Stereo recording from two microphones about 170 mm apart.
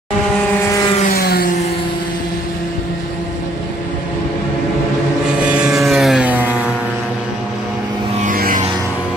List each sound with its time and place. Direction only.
1.1 s music: 65° left (ahead or behind)
5.4 s vehicle: 5° right (ahead or behind)
8.2 s music: 55° right (ahead or behind)